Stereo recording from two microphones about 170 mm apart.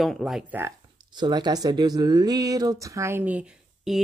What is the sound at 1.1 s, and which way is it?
Speech, 25° right (ahead or behind).